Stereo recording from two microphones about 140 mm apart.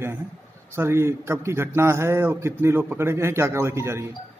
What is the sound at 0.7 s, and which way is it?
A man's voice, 20° right (ahead or behind).